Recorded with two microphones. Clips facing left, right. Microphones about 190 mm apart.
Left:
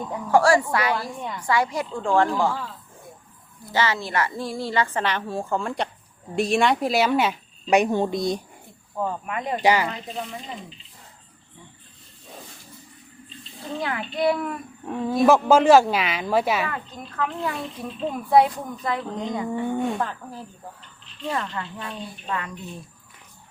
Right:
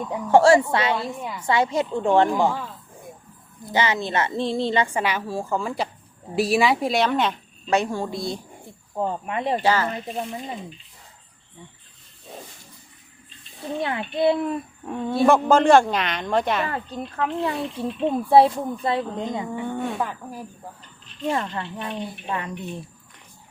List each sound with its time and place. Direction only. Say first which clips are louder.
0.1 s a woman's voice: right 3 dB; 25° right (ahead or behind)
1.2 s speech: even; 5° right (ahead or behind)
1.5 s a woman's voice: right 3 dB; 25° right (ahead or behind)
3.7 s a woman's voice: right 1 dB; 20° right (ahead or behind); by 7.3 s 5° left (ahead or behind)
7.7 s a woman's voice: left 3 dB; 20° left (ahead or behind)
9.0 s a woman's voice: right 2 dB; 30° right (ahead or behind)
9.6 s speech: left 3 dB; 15° left (ahead or behind)
13.8 s a woman's voice: right 2 dB; 25° right (ahead or behind)
14.8 s speech: left 1 dB; centre (ahead or behind)
16.6 s speech: right 2 dB; 35° right (ahead or behind)
17.2 s a woman's voice: right 2 dB; 20° right (ahead or behind)
19.8 s speech: left 1 dB; centre (ahead or behind)
20.1 s speech: right 2 dB; 10° right (ahead or behind)
21.2 s a woman's voice: right 3 dB; 25° right (ahead or behind)